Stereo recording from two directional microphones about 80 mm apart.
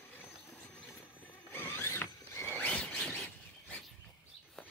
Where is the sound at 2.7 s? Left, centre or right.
Centre.